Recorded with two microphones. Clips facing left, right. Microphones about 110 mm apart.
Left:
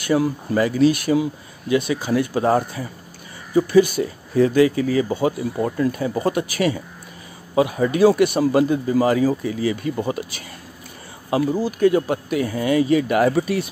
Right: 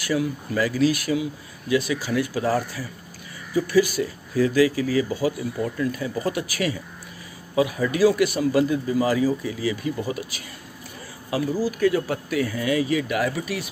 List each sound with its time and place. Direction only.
0.0 s speech: 35° left (ahead or behind)
8.9 s speech: 55° left (ahead or behind)
9.3 s speech: 45° left (ahead or behind)
10.0 s speech: 30° left (ahead or behind)